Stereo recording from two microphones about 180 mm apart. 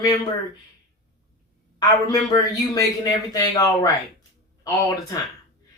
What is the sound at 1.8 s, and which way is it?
Speech, 20° left (ahead or behind).